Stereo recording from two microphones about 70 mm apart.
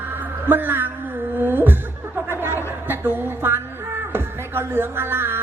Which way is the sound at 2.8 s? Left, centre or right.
Right.